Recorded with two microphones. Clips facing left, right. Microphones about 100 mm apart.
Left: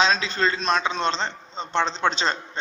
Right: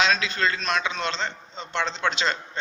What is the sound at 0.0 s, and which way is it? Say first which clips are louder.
A man's voice: left 2 dB; 30° left (ahead or behind).